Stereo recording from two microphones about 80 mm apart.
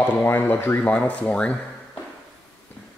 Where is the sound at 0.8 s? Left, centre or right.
Centre.